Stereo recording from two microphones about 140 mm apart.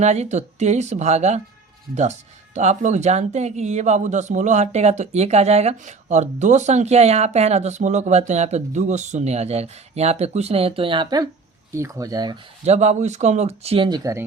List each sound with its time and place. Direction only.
0.0 s speech: 55° right (ahead or behind)
2.6 s speech: 55° right (ahead or behind); by 11.3 s 30° right (ahead or behind)
11.7 s speech: 20° right (ahead or behind)
12.6 s speech: 55° right (ahead or behind); by 14.0 s 40° right (ahead or behind)
14.0 s speech: 20° right (ahead or behind)